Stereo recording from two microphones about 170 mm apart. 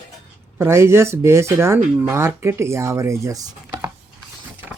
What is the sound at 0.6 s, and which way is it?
Speech, 15° right (ahead or behind).